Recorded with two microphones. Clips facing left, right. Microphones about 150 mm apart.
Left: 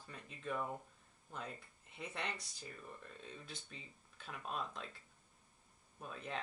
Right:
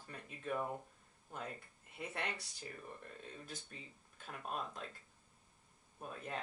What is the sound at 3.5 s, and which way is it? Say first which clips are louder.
Speech: right 2 dB; 45° right (ahead or behind).